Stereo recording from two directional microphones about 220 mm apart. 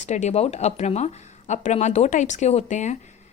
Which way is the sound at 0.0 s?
30° left (ahead or behind).